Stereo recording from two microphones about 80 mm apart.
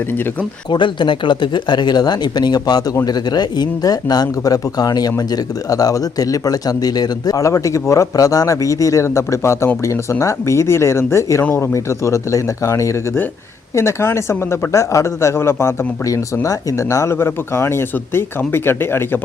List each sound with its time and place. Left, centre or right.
0.7 s speech: left
16.0 s speech: left